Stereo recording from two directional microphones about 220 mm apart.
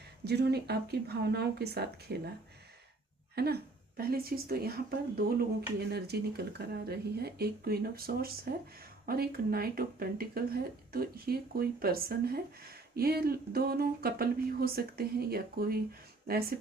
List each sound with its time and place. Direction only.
0.3 s speech: 50° right (ahead or behind)
3.3 s speech: 45° right (ahead or behind)